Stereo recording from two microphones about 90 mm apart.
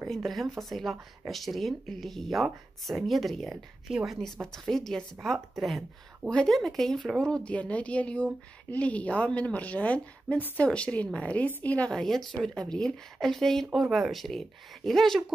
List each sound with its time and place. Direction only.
0.0 s a woman's voice: centre (ahead or behind); by 11.9 s 15° left (ahead or behind)
11.9 s speech: 5° left (ahead or behind)